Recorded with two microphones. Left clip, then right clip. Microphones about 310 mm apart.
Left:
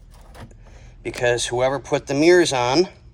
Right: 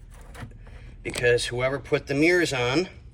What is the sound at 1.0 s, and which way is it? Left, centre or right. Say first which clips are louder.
Speech: left 2 dB; left.